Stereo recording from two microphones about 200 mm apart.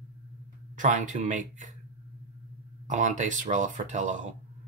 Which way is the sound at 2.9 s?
40° right (ahead or behind).